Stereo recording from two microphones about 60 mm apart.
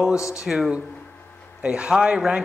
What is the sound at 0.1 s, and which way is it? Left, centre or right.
Speech, left.